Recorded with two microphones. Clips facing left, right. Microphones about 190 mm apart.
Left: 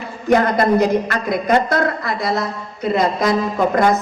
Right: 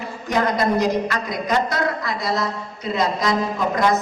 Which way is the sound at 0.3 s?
55° left (ahead or behind).